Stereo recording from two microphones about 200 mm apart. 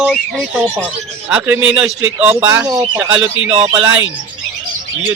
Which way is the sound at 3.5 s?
30° right (ahead or behind).